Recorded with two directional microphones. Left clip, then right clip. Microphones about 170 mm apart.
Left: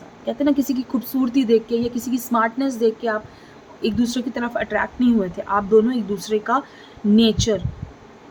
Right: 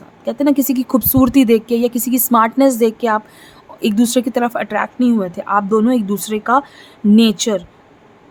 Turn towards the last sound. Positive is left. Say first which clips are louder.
# right 4 dB
turn(degrees=-45)  # may be behind; listen again after turning